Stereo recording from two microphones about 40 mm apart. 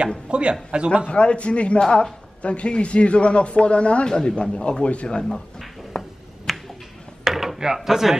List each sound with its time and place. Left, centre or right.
0.3 s a man's voice: right
1.0 s a man's voice: left
4.6 s a man's voice: left
5.9 s finger snapping: centre
6.5 s a sound: centre
7.2 s a sound: centre